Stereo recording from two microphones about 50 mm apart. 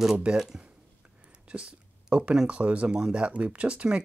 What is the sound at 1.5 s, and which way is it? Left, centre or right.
Speech, right.